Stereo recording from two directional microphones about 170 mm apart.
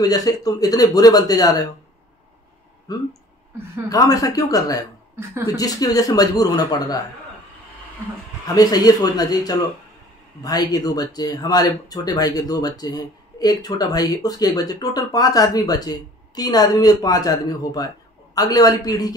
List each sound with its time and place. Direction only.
0.0 s speech: 20° left (ahead or behind)
2.9 s speech: 20° left (ahead or behind)
8.5 s speech: 20° left (ahead or behind)